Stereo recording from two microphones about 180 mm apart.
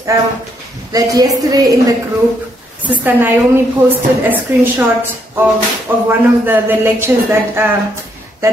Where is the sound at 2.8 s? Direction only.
10° right (ahead or behind).